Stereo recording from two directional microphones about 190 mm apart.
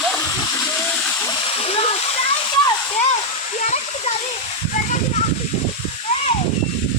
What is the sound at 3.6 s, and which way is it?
Waterfall, 35° left (ahead or behind).